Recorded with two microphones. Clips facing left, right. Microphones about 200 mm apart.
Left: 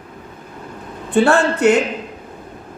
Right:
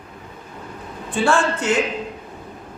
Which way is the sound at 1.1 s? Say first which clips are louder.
Left 5 dB; 60° left (ahead or behind).